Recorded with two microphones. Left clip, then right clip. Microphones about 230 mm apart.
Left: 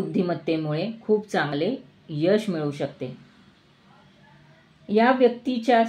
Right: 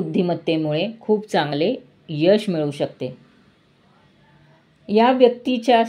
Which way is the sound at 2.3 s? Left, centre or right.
Right.